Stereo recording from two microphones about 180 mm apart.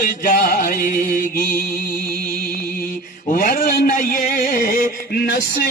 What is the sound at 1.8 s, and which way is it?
Music, 50° left (ahead or behind).